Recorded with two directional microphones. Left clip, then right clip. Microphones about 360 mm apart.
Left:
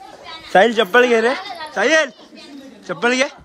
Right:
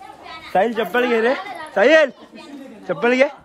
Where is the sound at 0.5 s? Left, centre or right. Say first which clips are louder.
Left 5 dB; left.